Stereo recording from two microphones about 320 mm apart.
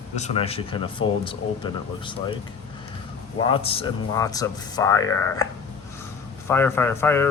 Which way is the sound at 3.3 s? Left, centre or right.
Centre.